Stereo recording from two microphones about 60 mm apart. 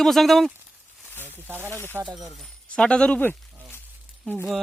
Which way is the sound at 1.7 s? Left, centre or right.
Left.